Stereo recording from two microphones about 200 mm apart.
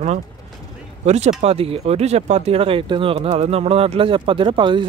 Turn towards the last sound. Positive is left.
turn(degrees=-25)  # may be behind; listen again after turning